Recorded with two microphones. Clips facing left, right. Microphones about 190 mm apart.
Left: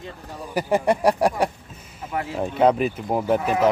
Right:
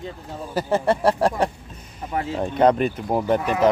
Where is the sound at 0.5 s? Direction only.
15° left (ahead or behind).